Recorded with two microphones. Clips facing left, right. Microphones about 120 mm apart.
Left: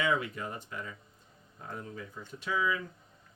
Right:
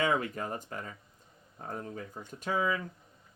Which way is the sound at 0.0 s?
45° right (ahead or behind).